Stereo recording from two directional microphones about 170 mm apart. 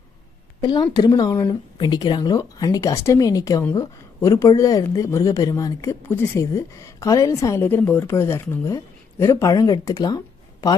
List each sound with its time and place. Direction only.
0.6 s speech: 25° left (ahead or behind)